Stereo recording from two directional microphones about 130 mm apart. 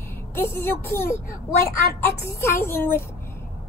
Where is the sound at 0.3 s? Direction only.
15° left (ahead or behind).